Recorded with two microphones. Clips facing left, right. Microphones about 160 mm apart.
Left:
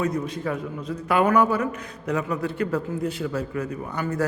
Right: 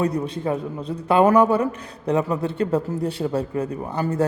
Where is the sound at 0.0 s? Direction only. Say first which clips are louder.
Right 3 dB; 30° right (ahead or behind).